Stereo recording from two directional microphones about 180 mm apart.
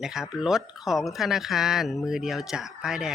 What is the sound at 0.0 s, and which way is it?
A man's voice, 5° right (ahead or behind).